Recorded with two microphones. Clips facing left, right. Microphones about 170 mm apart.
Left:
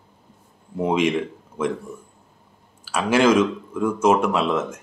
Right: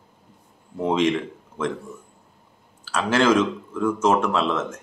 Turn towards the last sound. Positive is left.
turn(degrees=10)  # may be behind; listen again after turning